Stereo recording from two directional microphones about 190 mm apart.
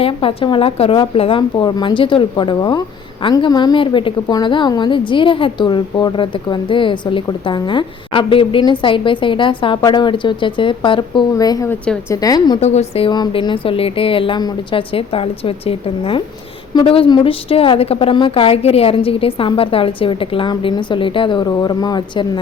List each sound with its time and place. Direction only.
0.0 s a woman's voice: 30° left (ahead or behind)
12.5 s a woman's voice: 35° left (ahead or behind)
13.1 s a woman's voice: 25° left (ahead or behind)